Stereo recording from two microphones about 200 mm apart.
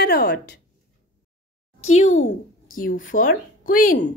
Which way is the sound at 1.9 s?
35° left (ahead or behind).